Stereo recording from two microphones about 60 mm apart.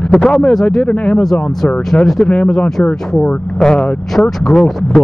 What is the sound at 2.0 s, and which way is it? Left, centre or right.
Speech, centre.